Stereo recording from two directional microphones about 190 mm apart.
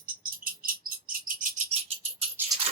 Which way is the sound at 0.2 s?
45° right (ahead or behind).